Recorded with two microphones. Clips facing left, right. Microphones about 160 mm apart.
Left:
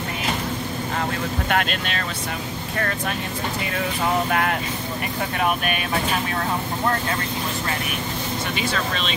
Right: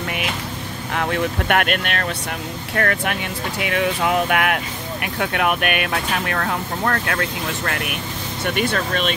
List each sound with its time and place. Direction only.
0.9 s speech: 65° right (ahead or behind)
8.5 s speech: 50° right (ahead or behind)